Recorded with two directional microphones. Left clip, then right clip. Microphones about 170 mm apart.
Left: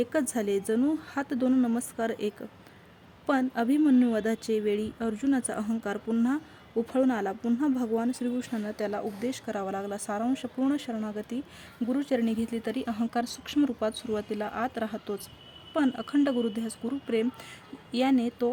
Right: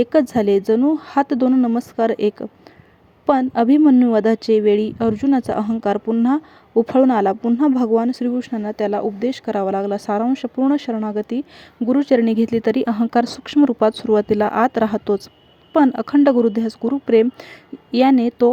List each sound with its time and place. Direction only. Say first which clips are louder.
0.0 s speech: right 12 dB; 35° right (ahead or behind)
1.5 s speech: right 9 dB; 25° right (ahead or behind)
2.0 s speech: right 16 dB; 40° right (ahead or behind)
3.8 s speech: right 10 dB; 25° right (ahead or behind)
4.1 s a woman's voice: right 13 dB; 40° right (ahead or behind)